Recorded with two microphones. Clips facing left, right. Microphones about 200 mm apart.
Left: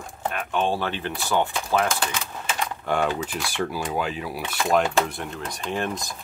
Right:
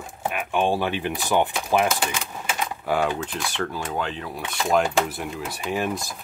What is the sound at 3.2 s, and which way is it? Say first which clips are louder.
Speech: left 1 dB; 5° left (ahead or behind).